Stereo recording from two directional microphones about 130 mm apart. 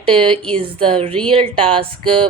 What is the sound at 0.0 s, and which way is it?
A woman's voice, 45° right (ahead or behind).